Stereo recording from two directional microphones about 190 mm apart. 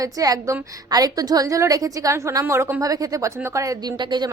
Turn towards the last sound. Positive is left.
turn(degrees=-25)  # may be behind; listen again after turning